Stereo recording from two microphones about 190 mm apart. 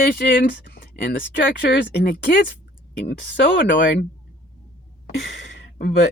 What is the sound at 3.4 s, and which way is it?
Speech, 65° left (ahead or behind).